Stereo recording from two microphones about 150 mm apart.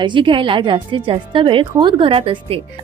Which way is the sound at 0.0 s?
30° right (ahead or behind).